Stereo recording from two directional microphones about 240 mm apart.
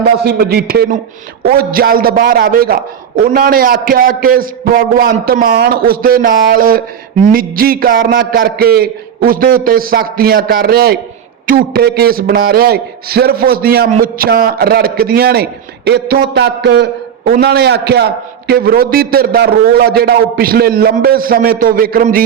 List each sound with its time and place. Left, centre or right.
0.3 s a man's voice: right